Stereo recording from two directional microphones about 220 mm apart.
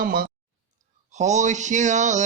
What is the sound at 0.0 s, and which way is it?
Speech, 40° right (ahead or behind).